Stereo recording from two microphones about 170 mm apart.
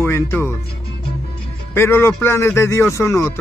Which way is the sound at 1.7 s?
15° left (ahead or behind).